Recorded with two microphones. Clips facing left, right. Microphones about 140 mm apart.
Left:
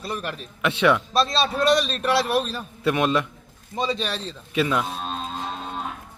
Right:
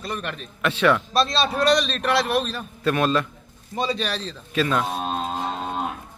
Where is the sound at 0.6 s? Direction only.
20° left (ahead or behind).